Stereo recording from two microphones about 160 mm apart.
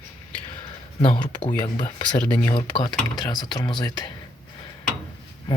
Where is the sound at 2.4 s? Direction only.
25° left (ahead or behind).